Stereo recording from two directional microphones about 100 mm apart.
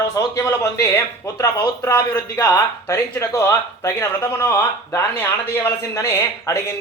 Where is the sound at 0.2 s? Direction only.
30° left (ahead or behind).